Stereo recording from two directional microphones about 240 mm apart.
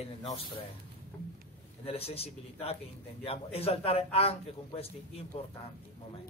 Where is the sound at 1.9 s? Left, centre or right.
Left.